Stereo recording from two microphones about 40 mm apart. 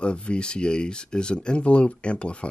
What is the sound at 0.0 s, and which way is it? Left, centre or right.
Speech, left.